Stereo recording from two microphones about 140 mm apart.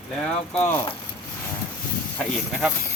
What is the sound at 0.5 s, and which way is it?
Speech, 15° left (ahead or behind).